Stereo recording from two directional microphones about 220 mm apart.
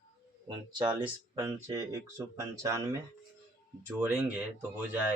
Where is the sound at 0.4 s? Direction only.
20° right (ahead or behind).